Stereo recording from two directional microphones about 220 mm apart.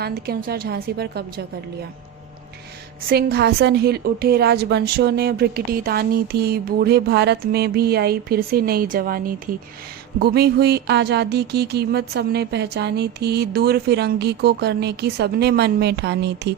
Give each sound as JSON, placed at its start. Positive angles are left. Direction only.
{"t": 0.0, "sound": "a woman's voice", "side_deg": -45}
{"t": 3.1, "sound": "a woman's voice", "side_deg": -45}